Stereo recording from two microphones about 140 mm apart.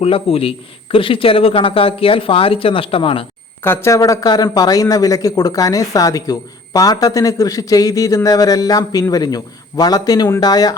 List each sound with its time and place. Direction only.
0.0 s a man's voice: 45° left (ahead or behind)
3.6 s speech: 15° left (ahead or behind)